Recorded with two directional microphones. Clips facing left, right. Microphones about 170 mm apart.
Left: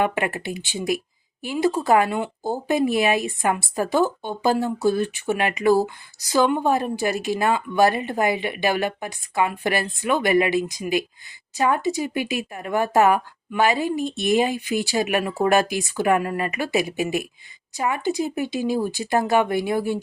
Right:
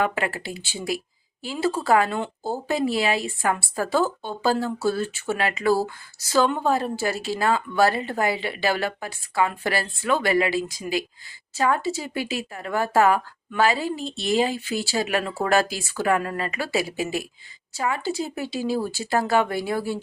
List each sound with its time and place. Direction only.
0.0 s a woman's voice: 20° left (ahead or behind)